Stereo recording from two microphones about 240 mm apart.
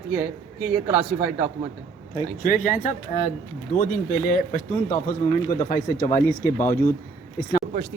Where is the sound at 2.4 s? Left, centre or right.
Left.